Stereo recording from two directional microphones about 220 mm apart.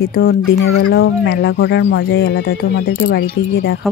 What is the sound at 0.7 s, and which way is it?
Speech, 65° left (ahead or behind).